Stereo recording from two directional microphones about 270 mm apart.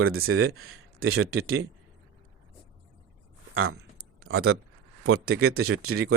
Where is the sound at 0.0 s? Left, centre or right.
Right.